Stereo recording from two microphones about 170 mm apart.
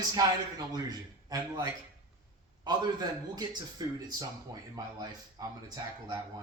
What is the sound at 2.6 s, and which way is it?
A man's voice, 25° right (ahead or behind).